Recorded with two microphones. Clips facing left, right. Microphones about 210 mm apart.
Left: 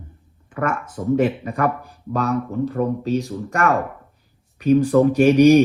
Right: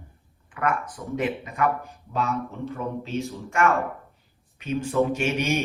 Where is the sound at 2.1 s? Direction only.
35° left (ahead or behind).